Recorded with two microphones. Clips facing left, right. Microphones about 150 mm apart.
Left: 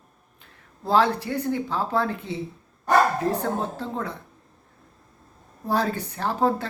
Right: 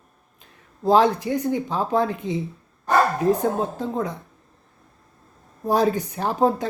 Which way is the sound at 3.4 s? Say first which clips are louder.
Right 4 dB; 15° right (ahead or behind).